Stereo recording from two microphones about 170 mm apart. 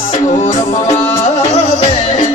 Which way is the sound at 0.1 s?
45° left (ahead or behind).